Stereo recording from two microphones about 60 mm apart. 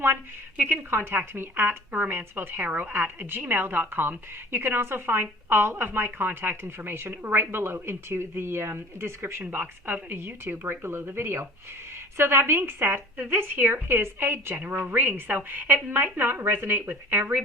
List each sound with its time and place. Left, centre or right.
0.5 s a woman's voice: right
0.9 s a woman's voice: right
14.5 s a woman's voice: right